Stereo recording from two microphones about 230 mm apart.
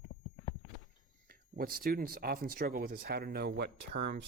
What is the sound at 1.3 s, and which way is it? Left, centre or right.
Speech, right.